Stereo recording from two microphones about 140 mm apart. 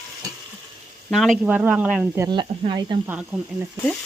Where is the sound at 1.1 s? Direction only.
Centre (ahead or behind).